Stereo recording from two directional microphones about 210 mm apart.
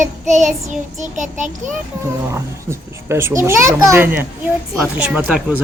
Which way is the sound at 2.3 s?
10° right (ahead or behind).